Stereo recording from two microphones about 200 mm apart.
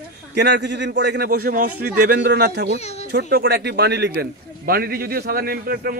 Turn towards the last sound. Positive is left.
turn(degrees=-50)  # may be behind; listen again after turning